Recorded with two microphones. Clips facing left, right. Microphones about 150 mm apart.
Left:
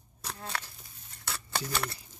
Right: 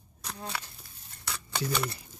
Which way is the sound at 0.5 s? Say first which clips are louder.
Even; 5° right (ahead or behind).